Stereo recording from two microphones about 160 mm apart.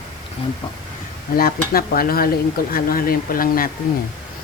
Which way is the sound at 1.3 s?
70° left (ahead or behind).